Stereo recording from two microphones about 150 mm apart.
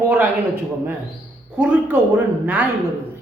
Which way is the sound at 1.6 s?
10° right (ahead or behind).